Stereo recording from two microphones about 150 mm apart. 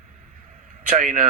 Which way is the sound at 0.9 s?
55° right (ahead or behind).